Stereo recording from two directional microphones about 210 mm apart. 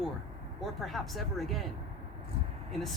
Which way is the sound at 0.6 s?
Centre (ahead or behind).